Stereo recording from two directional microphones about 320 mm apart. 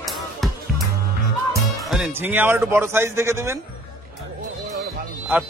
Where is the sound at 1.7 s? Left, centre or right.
Centre.